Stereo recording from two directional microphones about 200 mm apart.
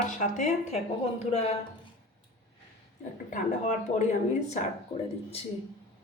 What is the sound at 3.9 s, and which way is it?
Speech, 30° left (ahead or behind).